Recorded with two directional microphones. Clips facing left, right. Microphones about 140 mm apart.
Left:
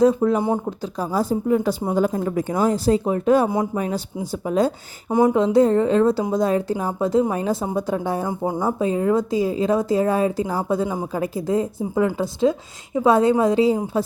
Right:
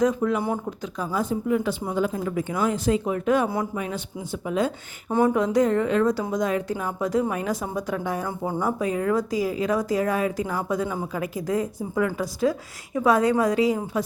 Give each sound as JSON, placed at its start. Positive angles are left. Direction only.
{"t": 0.0, "sound": "speech", "side_deg": 30}
{"t": 8.3, "sound": "speech", "side_deg": 15}
{"t": 8.6, "sound": "speech", "side_deg": 25}